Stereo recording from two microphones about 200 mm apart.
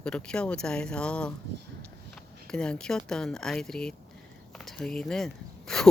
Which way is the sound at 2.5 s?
5° left (ahead or behind).